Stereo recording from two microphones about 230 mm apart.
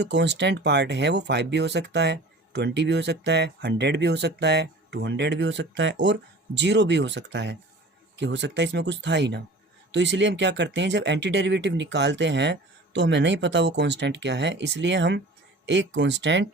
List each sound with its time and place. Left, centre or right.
0.0 s speech: right